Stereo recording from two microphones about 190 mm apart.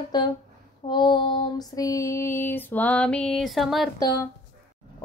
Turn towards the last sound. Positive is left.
turn(degrees=20)  # may be behind; listen again after turning